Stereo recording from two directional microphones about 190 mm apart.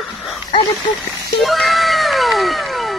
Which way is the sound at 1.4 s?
Centre (ahead or behind).